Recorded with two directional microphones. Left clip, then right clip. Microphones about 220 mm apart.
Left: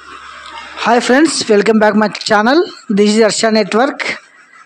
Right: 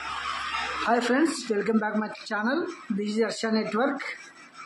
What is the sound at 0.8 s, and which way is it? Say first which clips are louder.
Speech: left 14 dB; 40° left (ahead or behind).